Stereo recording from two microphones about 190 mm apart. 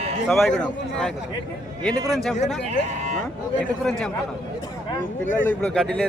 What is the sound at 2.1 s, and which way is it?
Speech, centre (ahead or behind).